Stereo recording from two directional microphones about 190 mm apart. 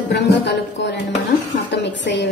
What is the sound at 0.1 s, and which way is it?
A woman's voice, 65° left (ahead or behind).